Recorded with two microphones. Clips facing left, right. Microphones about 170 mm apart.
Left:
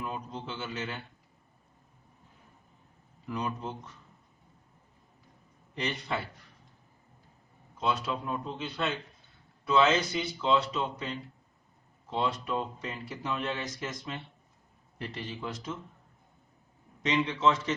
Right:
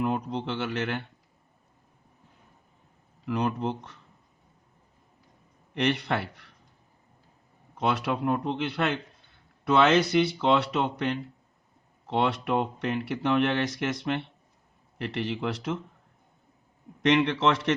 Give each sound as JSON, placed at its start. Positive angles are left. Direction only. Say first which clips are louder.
{"t": 0.0, "sound": "speech", "louder": "right 9 dB", "side_deg": -70}
{"t": 3.2, "sound": "speech", "louder": "right 7 dB", "side_deg": -70}
{"t": 5.7, "sound": "speech", "louder": "right 7 dB", "side_deg": -70}
{"t": 7.8, "sound": "speech", "louder": "right 4 dB", "side_deg": -70}
{"t": 17.0, "sound": "a man's voice", "louder": "right 5 dB", "side_deg": -70}